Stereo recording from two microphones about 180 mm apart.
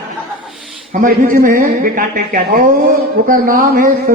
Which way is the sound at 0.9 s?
50° right (ahead or behind).